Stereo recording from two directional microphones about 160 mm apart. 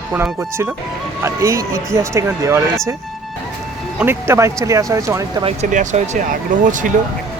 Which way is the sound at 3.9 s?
15° right (ahead or behind).